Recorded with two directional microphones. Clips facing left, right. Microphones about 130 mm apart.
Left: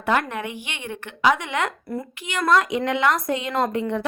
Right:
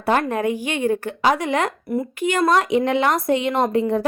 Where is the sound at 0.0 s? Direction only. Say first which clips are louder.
Right 4 dB; 35° right (ahead or behind).